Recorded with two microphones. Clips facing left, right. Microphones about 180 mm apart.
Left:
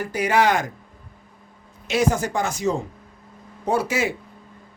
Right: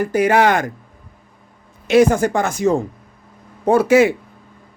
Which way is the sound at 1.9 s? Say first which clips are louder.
Right 8 dB; 55° right (ahead or behind).